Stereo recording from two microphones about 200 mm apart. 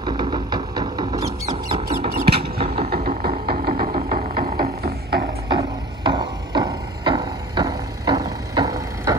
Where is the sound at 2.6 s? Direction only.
30° right (ahead or behind).